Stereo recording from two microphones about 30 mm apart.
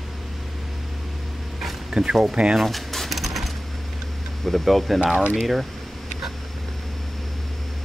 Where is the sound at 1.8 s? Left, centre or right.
Right.